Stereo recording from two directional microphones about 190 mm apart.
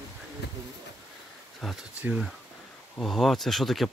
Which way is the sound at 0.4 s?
60° left (ahead or behind).